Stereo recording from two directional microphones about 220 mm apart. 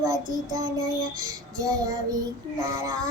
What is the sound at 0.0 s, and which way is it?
Child singing, 15° right (ahead or behind).